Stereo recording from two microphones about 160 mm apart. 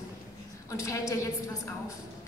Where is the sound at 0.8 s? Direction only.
20° left (ahead or behind).